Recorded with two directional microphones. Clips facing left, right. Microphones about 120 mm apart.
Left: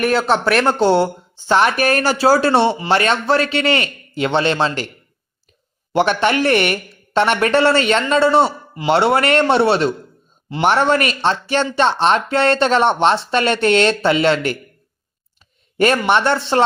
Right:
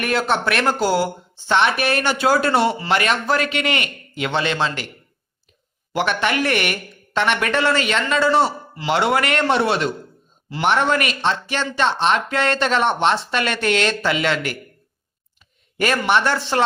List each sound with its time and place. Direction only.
0.0 s speech: 30° left (ahead or behind)
5.9 s a man's voice: 30° left (ahead or behind)
15.8 s a man's voice: 25° left (ahead or behind)